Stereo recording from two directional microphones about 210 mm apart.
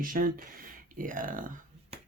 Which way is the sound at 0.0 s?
40° right (ahead or behind).